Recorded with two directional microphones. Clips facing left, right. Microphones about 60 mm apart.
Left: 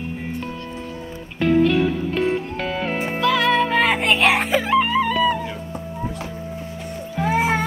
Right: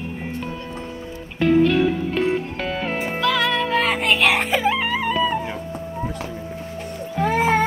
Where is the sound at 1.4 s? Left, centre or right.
Centre.